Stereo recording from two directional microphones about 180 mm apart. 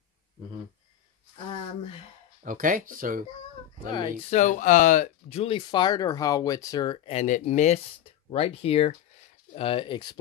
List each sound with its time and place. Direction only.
2.4 s speech: 50° right (ahead or behind)
4.3 s speech: 40° left (ahead or behind); by 7.0 s 20° left (ahead or behind)
7.1 s speech: 40° left (ahead or behind); by 10.1 s 25° left (ahead or behind)